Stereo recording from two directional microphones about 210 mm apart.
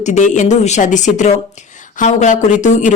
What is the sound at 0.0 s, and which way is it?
Speech, 35° left (ahead or behind).